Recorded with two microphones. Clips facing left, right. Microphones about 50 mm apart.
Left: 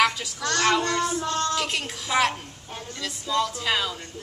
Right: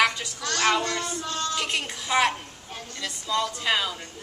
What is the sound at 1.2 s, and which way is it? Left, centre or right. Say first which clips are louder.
Music: left 4 dB; left.